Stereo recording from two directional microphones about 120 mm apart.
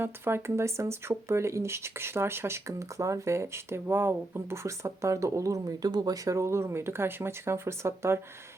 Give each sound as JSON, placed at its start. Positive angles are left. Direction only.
{"t": 0.0, "sound": "speech", "side_deg": -20}